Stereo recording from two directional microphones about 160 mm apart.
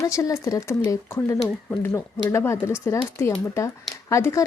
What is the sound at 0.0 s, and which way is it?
Speech, 20° left (ahead or behind).